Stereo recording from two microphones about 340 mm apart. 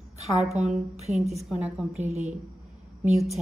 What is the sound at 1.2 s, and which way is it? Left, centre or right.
Speech, centre.